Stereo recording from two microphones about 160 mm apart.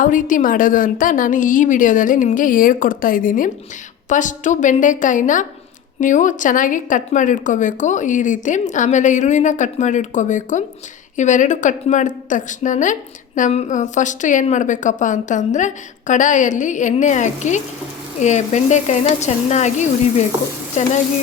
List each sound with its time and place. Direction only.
0.0 s a woman's voice: 55° left (ahead or behind)